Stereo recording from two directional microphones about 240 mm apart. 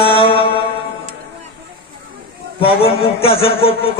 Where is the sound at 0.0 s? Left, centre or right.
Left.